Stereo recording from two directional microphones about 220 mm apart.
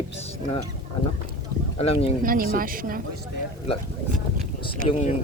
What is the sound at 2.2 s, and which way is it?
Speech, 40° right (ahead or behind).